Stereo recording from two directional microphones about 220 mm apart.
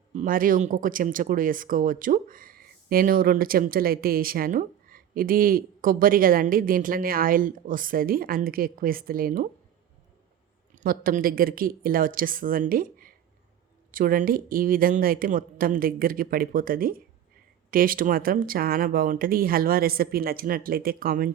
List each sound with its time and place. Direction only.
0.1 s speech: 35° right (ahead or behind)
10.8 s speech: 40° right (ahead or behind)